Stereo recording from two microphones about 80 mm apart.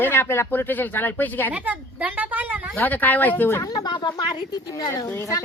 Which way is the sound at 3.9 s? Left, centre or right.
Left.